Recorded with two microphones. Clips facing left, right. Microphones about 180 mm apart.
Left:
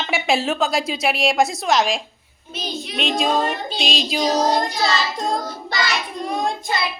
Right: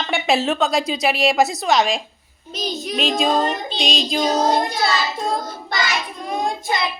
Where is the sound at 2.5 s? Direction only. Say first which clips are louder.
Right 3 dB; 40° right (ahead or behind).